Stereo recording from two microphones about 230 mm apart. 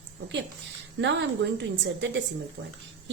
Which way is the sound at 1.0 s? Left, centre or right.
Right.